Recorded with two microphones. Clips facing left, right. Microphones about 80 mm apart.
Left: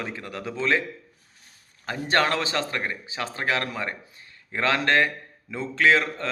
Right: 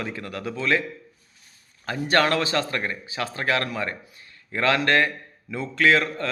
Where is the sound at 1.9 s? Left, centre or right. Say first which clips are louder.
Right 2 dB; left.